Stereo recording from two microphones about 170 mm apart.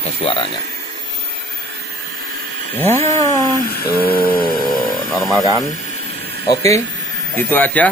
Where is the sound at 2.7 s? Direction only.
15° left (ahead or behind).